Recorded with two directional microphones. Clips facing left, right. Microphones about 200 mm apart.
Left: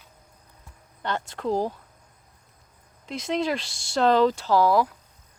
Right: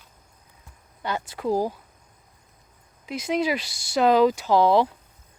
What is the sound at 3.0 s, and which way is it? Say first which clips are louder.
Speech: right 2 dB; 5° right (ahead or behind).